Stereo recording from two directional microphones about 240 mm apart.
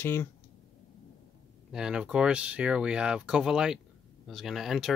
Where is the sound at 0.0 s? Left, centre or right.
Centre.